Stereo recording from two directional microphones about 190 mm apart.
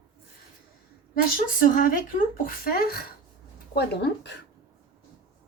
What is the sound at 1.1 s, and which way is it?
Speech, 45° left (ahead or behind).